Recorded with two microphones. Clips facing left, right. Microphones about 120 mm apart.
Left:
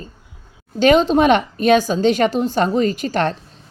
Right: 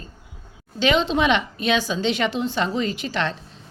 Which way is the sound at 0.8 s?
45° left (ahead or behind).